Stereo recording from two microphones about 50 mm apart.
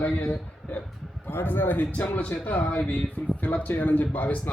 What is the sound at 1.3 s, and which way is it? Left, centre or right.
A man's voice, left.